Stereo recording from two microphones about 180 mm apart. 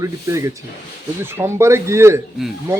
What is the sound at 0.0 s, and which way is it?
A man's voice, 15° right (ahead or behind).